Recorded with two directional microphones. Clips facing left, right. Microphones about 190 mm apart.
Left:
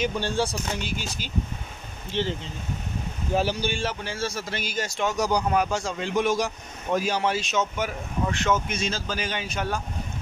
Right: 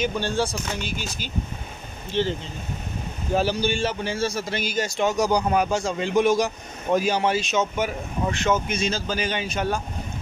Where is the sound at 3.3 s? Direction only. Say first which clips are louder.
Right 3 dB; 15° left (ahead or behind).